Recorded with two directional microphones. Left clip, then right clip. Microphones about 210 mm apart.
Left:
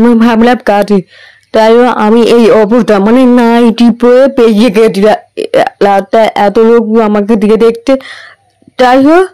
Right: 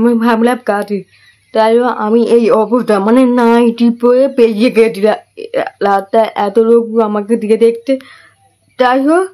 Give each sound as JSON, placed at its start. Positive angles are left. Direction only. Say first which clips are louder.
{"t": 0.0, "sound": "speech", "louder": "left 5 dB", "side_deg": 35}